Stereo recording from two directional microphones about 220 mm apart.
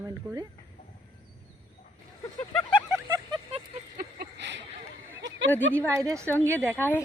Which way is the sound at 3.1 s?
20° right (ahead or behind).